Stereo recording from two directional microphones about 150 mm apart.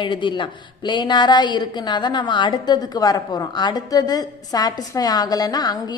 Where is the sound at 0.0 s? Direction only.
30° left (ahead or behind).